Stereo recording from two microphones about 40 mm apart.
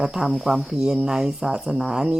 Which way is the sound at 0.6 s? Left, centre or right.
Centre.